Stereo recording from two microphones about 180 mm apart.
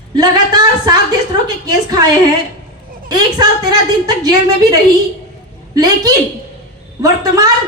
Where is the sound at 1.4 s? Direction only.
20° right (ahead or behind).